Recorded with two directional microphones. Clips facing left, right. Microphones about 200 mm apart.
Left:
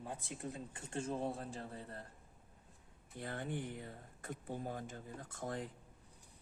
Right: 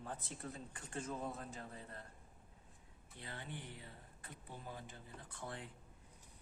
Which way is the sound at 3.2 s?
50° left (ahead or behind).